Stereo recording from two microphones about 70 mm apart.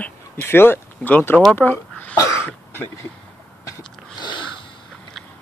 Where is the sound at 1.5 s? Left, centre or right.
Left.